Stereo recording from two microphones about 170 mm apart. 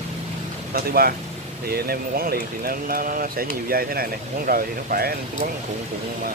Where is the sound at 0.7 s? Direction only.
60° right (ahead or behind).